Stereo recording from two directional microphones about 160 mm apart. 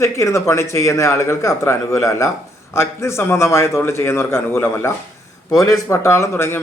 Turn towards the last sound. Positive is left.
turn(degrees=15)  # may be behind; listen again after turning